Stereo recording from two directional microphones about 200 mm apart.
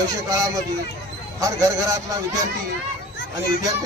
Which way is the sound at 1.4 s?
15° right (ahead or behind).